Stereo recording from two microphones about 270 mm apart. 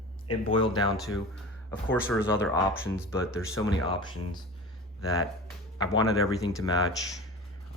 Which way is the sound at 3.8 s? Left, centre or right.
Centre.